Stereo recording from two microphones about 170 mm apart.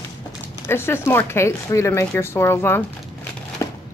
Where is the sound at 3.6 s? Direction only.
15° left (ahead or behind).